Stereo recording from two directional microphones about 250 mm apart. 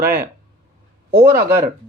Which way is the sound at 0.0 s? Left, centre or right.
Centre.